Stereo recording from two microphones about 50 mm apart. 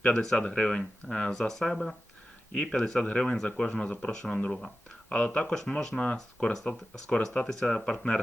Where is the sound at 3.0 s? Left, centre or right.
Centre.